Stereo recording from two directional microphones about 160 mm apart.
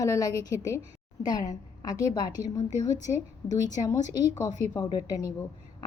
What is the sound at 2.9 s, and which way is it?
Speech, 50° left (ahead or behind).